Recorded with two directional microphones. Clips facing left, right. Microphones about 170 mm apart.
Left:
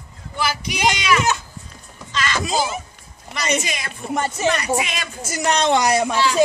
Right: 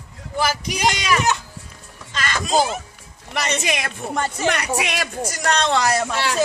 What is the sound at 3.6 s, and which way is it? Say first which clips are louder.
Speech: right 4 dB; 65° right (ahead or behind).